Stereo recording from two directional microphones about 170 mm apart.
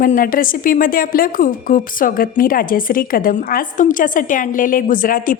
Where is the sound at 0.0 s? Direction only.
55° left (ahead or behind).